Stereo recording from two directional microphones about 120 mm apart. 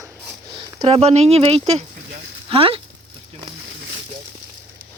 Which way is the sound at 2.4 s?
50° right (ahead or behind).